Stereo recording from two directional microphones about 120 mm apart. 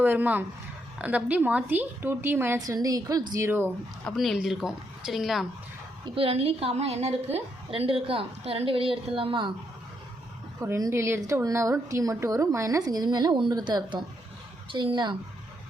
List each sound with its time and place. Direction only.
0.0 s a woman's voice: 15° right (ahead or behind)
4.0 s speech: centre (ahead or behind)
6.1 s a woman's voice: 55° right (ahead or behind)
10.6 s a woman's voice: 25° right (ahead or behind); by 15.1 s 40° right (ahead or behind)